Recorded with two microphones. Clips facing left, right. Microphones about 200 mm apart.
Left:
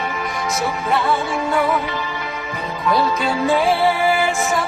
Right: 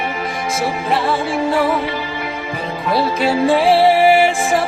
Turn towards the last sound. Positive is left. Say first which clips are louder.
# right 5 dB
turn(degrees=-30)  # may be behind; listen again after turning